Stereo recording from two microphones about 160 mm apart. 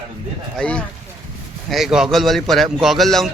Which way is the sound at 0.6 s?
5° left (ahead or behind).